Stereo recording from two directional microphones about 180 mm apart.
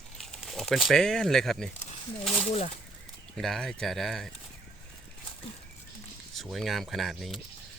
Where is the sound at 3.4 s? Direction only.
Centre (ahead or behind).